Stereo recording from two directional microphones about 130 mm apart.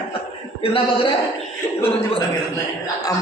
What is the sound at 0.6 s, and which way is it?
Speech, 45° left (ahead or behind).